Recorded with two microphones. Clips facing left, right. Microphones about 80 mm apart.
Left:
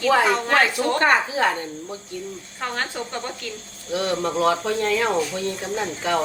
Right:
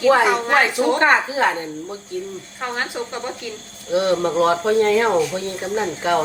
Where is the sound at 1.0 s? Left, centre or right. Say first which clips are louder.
Right 1 dB; right.